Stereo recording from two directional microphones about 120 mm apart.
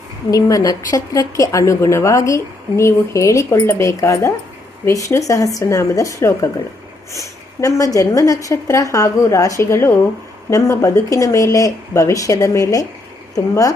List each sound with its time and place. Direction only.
0.3 s a woman's voice: 25° left (ahead or behind)